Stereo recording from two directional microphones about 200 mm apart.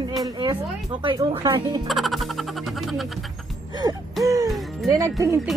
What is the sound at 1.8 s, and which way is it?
Frog, centre (ahead or behind).